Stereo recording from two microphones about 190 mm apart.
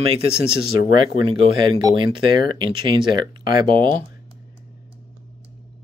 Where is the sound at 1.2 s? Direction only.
25° right (ahead or behind).